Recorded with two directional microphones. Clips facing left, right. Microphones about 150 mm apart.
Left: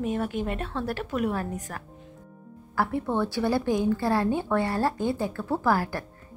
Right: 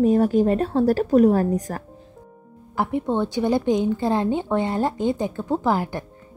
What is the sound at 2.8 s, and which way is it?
A woman's voice, 20° right (ahead or behind).